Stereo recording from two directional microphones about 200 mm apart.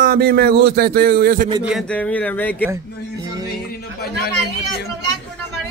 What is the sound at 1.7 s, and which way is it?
Speech, 5° left (ahead or behind).